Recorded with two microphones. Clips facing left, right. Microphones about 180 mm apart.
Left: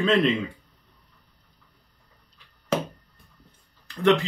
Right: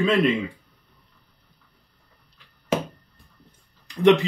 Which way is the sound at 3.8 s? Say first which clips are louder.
Right 4 dB; 15° right (ahead or behind).